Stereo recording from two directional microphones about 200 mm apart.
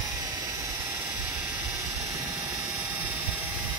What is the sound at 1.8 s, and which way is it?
Vehicle, 15° right (ahead or behind).